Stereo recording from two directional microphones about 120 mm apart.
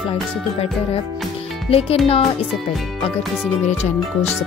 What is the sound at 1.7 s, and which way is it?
Speech, 55° left (ahead or behind).